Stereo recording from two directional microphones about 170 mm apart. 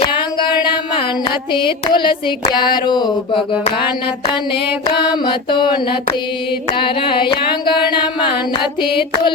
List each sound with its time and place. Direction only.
0.1 s a sound: 25° left (ahead or behind)
1.5 s female singing: 30° left (ahead or behind)
5.0 s female singing: 25° left (ahead or behind)